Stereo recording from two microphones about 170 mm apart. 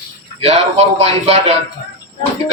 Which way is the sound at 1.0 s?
35° right (ahead or behind).